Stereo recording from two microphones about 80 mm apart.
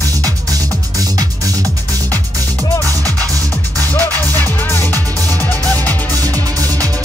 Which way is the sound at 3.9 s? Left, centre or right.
Left.